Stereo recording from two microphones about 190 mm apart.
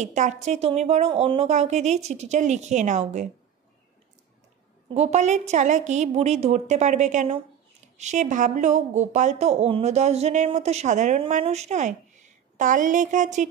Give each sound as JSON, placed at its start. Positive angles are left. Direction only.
{"t": 0.0, "sound": "speech", "side_deg": -40}
{"t": 4.8, "sound": "speech", "side_deg": -35}